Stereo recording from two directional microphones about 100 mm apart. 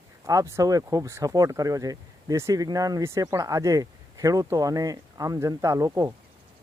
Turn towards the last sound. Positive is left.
turn(degrees=-35)  # may be behind; listen again after turning